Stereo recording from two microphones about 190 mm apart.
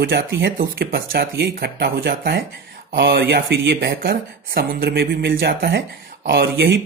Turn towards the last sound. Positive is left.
turn(degrees=-60)  # may be behind; listen again after turning